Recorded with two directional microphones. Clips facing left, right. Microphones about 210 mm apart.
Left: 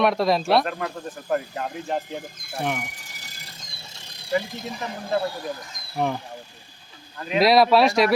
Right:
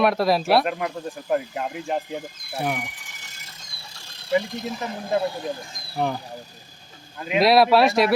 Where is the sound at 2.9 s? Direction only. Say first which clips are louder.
Left 2 dB; 40° left (ahead or behind).